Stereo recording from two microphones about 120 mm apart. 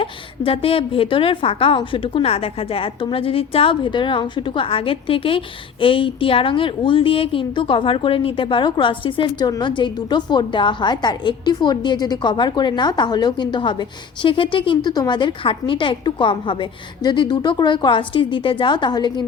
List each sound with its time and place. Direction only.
0.0 s a woman's voice: 50° left (ahead or behind)